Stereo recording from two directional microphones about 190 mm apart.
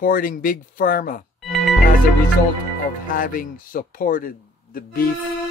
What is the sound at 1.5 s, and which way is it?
Music, centre (ahead or behind).